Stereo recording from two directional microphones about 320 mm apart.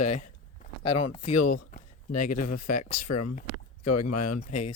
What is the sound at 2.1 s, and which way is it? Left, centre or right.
Speech, left.